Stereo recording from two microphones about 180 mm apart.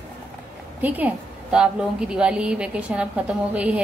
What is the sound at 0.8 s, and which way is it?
A woman's voice, 10° right (ahead or behind).